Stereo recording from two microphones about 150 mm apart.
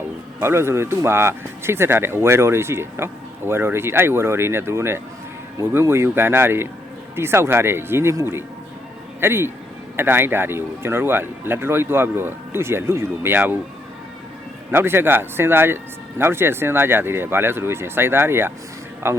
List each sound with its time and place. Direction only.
0.3 s speech: 15° right (ahead or behind)
14.7 s speech: 15° right (ahead or behind)